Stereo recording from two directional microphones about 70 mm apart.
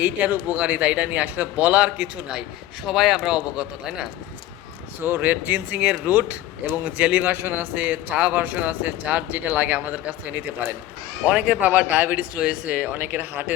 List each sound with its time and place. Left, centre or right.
0.0 s a man's voice: right
4.9 s a man's voice: right